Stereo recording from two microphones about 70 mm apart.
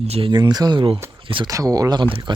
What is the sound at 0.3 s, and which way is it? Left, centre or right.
Speech, right.